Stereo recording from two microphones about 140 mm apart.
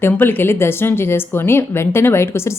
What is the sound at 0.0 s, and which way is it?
A woman's voice, 15° left (ahead or behind).